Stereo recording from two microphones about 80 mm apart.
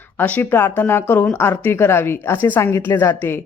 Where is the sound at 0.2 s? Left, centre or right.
Centre.